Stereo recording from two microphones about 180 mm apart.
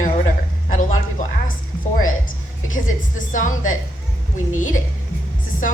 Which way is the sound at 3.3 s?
45° left (ahead or behind).